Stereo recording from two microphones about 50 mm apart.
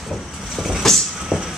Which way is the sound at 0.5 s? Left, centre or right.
Centre.